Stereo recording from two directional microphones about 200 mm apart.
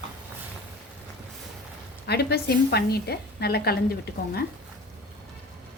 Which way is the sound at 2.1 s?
55° left (ahead or behind).